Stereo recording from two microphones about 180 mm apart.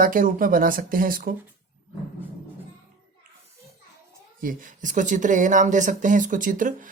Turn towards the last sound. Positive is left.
turn(degrees=-45)  # may be behind; listen again after turning